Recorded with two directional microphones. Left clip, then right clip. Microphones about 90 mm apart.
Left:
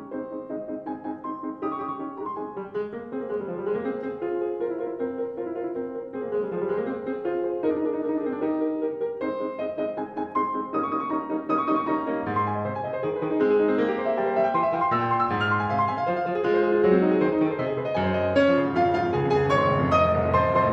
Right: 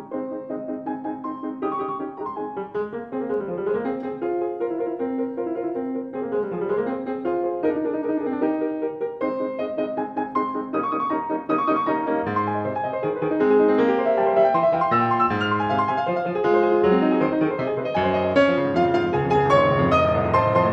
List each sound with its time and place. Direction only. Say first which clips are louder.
8.4 s music: right 2 dB; 25° right (ahead or behind)